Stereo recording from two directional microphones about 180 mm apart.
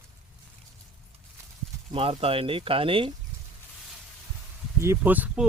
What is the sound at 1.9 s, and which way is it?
Speech, 30° right (ahead or behind).